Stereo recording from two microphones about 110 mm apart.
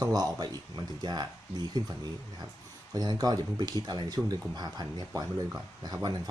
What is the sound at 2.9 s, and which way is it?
Speech, 35° right (ahead or behind).